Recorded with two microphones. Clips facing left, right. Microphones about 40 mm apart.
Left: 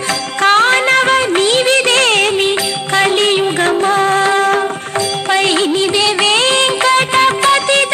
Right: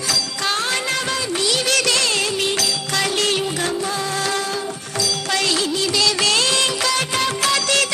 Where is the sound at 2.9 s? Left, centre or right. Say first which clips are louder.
Left 9 dB; left.